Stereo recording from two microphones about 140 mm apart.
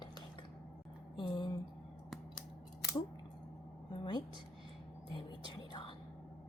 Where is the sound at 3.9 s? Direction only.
30° left (ahead or behind).